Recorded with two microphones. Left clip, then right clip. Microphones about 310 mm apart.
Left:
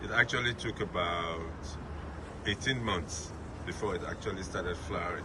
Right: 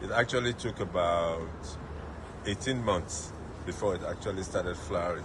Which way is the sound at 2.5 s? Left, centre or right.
Centre.